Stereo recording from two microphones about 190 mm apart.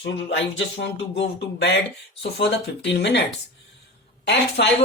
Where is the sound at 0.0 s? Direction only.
70° left (ahead or behind).